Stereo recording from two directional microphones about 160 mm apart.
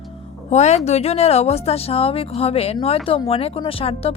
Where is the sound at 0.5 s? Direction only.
45° left (ahead or behind).